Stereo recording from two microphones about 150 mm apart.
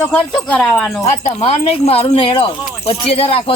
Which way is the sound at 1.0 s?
50° left (ahead or behind).